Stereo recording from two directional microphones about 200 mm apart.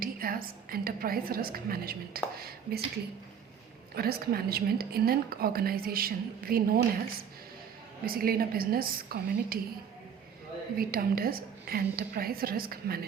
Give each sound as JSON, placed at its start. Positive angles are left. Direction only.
{"t": 0.0, "sound": "a woman's voice", "side_deg": -45}
{"t": 3.9, "sound": "a woman's voice", "side_deg": -50}
{"t": 8.0, "sound": "a woman's voice", "side_deg": -50}
{"t": 10.8, "sound": "a woman's voice", "side_deg": -50}